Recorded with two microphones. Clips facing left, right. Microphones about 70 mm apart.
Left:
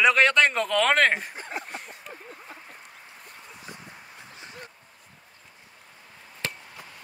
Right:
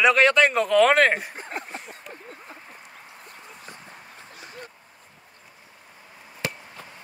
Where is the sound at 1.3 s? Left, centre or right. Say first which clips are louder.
Right 1 dB; right.